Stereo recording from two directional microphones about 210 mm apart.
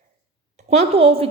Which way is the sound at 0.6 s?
30° right (ahead or behind).